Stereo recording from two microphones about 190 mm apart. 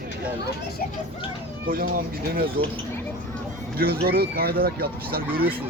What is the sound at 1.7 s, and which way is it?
Speech, 50° right (ahead or behind).